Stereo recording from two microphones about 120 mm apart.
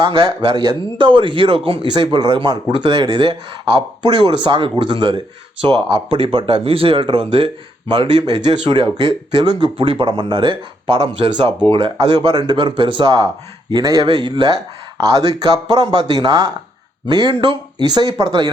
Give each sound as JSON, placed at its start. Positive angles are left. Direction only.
{"t": 0.0, "sound": "speech", "side_deg": -45}
{"t": 14.1, "sound": "speech", "side_deg": -40}